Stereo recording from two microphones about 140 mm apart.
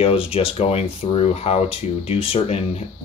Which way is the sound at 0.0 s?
45° left (ahead or behind).